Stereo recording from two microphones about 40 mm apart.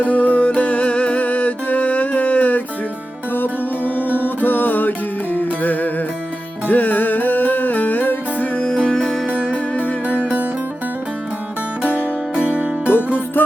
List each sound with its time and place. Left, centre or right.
0.0 s music: left
3.3 s music: left
8.5 s music: left
9.0 s music: centre
9.3 s music: centre
12.4 s music: right
12.9 s music: left